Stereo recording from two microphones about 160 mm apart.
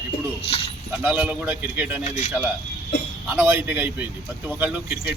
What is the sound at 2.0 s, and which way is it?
Speech, 45° left (ahead or behind).